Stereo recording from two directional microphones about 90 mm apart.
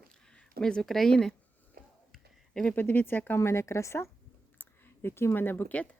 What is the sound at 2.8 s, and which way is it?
A woman's voice, 20° left (ahead or behind).